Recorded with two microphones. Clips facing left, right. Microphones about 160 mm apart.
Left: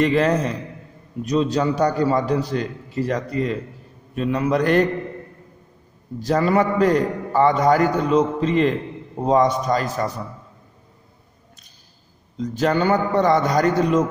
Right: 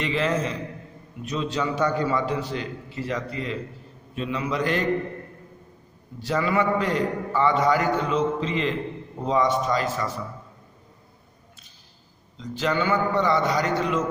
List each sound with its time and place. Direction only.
0.0 s a man's voice: 45° left (ahead or behind)
6.2 s a man's voice: 40° left (ahead or behind)
12.4 s a man's voice: 45° left (ahead or behind)